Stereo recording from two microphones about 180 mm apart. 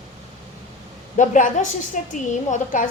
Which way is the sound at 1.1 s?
45° left (ahead or behind).